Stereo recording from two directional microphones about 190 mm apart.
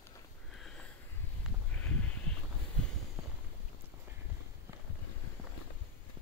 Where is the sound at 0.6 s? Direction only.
5° left (ahead or behind).